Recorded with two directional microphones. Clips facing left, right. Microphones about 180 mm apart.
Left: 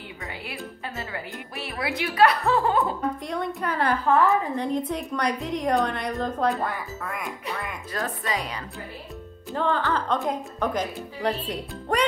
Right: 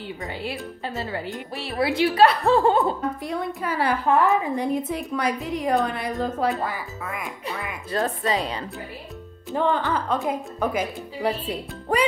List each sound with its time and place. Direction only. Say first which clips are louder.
0.4 s speech: right 5 dB; 30° right (ahead or behind)
3.3 s a woman's voice: right 1 dB; 5° right (ahead or behind)
7.9 s speech: right 6 dB; 30° right (ahead or behind)
9.5 s speech: right 2 dB; 15° right (ahead or behind)
10.0 s a woman's voice: right 1 dB; 5° right (ahead or behind)